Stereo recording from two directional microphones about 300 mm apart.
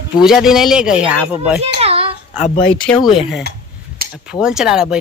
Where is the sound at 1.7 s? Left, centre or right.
Centre.